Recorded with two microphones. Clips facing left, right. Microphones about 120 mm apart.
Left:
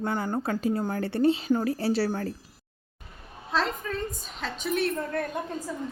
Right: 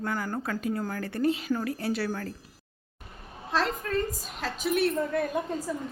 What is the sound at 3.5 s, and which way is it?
A woman's voice, centre (ahead or behind).